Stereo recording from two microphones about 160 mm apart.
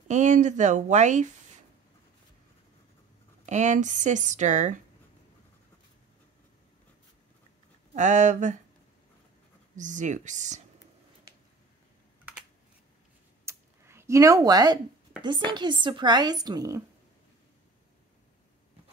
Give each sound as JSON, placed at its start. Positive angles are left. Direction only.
{"t": 0.1, "sound": "speech", "side_deg": -50}
{"t": 3.4, "sound": "speech", "side_deg": -50}
{"t": 7.9, "sound": "speech", "side_deg": -50}
{"t": 9.8, "sound": "speech", "side_deg": -50}
{"t": 13.5, "sound": "a sound", "side_deg": -15}
{"t": 15.2, "sound": "speech", "side_deg": -30}